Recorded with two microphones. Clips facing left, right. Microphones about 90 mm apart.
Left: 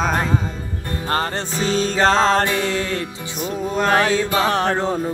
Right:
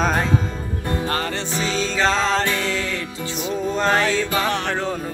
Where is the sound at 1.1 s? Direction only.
40° left (ahead or behind).